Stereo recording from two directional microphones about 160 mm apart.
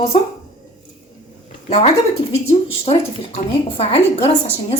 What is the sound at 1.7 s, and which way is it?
A woman's voice, 40° left (ahead or behind).